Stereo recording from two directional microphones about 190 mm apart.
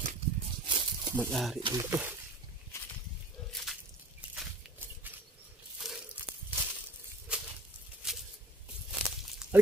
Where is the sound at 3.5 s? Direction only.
Centre (ahead or behind).